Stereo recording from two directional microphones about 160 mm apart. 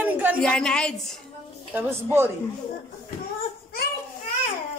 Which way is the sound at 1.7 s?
15° right (ahead or behind).